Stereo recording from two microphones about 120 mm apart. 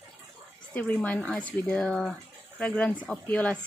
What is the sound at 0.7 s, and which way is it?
Speech, 10° left (ahead or behind).